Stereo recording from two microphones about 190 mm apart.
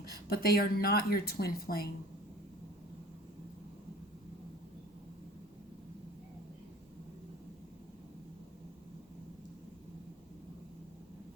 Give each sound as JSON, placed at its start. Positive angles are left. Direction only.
{"t": 0.1, "sound": "speech", "side_deg": 55}